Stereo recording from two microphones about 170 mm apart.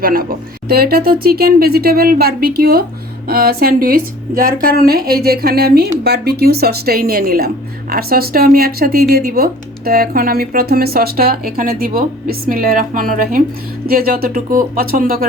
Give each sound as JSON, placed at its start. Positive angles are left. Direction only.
{"t": 0.0, "sound": "a woman's voice", "side_deg": -60}